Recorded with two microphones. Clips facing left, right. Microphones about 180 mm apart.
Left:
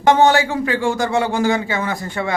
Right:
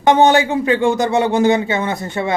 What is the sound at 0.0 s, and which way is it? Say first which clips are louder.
A man's voice: right 2 dB; 20° right (ahead or behind).